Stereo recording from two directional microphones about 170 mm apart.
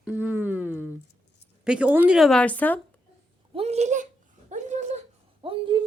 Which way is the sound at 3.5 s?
40° right (ahead or behind).